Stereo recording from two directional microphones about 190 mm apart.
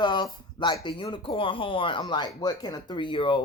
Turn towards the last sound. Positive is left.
turn(degrees=25)  # may be behind; listen again after turning